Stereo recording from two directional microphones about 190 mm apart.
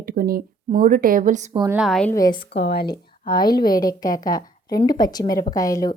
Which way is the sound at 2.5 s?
65° left (ahead or behind).